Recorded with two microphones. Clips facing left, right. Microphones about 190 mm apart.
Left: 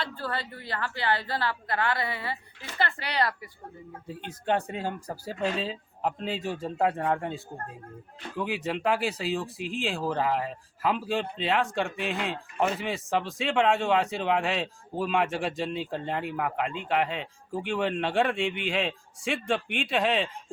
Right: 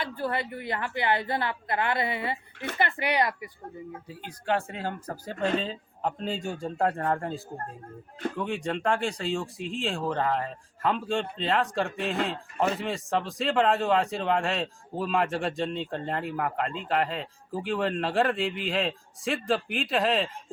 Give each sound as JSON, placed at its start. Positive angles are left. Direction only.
{"t": 0.0, "sound": "a woman's voice", "side_deg": -20}
{"t": 4.3, "sound": "speech", "side_deg": 20}